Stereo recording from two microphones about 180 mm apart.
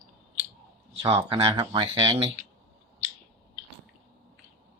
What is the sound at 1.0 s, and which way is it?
Speech, 30° right (ahead or behind).